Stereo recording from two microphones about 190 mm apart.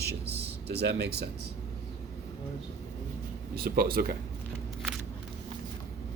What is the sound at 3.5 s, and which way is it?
Speech, 50° right (ahead or behind).